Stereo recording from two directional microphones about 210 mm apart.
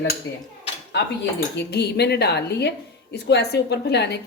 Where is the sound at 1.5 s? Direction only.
50° left (ahead or behind).